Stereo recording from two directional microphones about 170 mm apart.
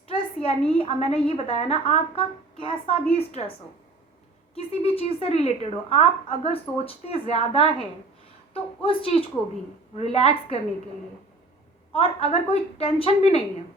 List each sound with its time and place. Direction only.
0.1 s a woman's voice: 35° left (ahead or behind)
4.5 s a woman's voice: 35° left (ahead or behind)
8.8 s a woman's voice: 35° left (ahead or behind)
11.9 s a woman's voice: 35° left (ahead or behind)